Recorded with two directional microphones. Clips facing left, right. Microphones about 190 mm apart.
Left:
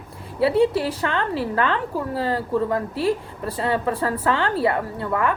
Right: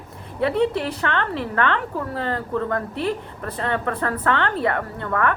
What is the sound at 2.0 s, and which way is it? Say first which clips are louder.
Speech: left 2 dB; 10° left (ahead or behind).